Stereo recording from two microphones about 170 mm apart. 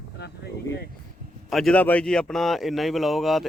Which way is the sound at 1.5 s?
Centre (ahead or behind).